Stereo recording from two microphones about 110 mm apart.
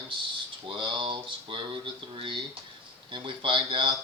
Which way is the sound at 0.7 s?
50° right (ahead or behind).